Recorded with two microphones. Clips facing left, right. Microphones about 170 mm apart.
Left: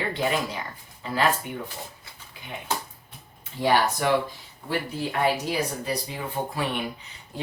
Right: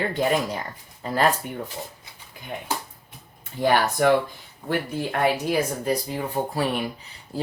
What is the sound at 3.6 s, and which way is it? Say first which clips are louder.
Speech: right 2 dB; 50° right (ahead or behind).